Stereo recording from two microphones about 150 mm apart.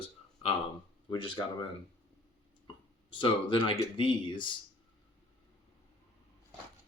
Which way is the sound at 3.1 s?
35° left (ahead or behind).